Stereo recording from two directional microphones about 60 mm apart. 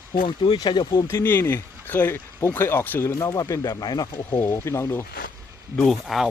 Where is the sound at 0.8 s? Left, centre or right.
Left.